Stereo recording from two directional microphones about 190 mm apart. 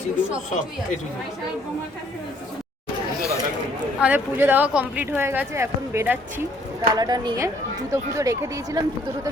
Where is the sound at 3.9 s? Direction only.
5° right (ahead or behind).